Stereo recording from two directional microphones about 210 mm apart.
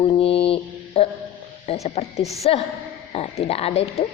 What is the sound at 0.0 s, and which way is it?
Mantra, 25° left (ahead or behind).